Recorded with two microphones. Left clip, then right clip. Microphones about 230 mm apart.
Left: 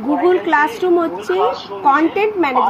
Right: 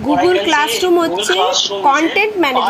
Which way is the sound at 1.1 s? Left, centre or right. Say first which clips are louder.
Right 3 dB; right.